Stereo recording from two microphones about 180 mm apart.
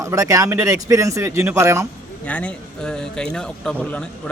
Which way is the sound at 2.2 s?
5° left (ahead or behind).